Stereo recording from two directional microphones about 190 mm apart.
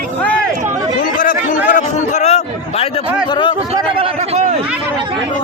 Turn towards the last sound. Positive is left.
turn(degrees=-30)  # may be behind; listen again after turning